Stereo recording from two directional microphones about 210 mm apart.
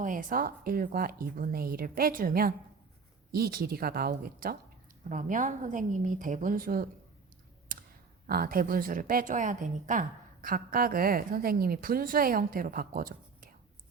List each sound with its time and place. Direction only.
0.0 s a woman's voice: 40° right (ahead or behind)
8.3 s a woman's voice: 45° right (ahead or behind)